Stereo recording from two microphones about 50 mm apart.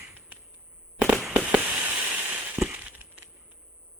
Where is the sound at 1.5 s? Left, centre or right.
Right.